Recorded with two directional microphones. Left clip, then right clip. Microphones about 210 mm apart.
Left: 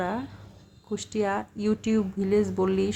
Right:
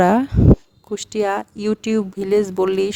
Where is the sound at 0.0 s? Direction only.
50° right (ahead or behind).